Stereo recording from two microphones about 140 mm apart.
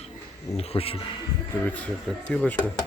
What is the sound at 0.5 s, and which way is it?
Speech, 45° left (ahead or behind).